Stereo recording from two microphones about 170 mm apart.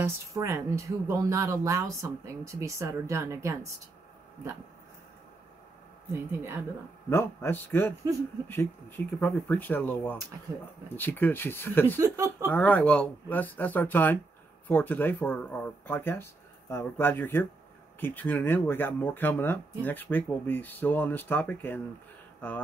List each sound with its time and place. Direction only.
0.0 s speech: 15° right (ahead or behind)
7.1 s speech: 15° left (ahead or behind)
12.0 s speech: 20° right (ahead or behind)
12.4 s speech: 10° left (ahead or behind)